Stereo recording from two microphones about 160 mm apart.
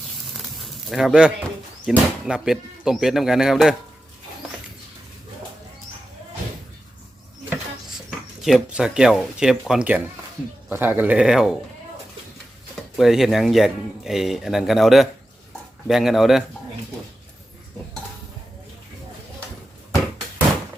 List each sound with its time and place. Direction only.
0.5 s a sound: centre (ahead or behind)
1.9 s speech: 5° right (ahead or behind)
8.4 s speech: centre (ahead or behind)
13.0 s speech: centre (ahead or behind)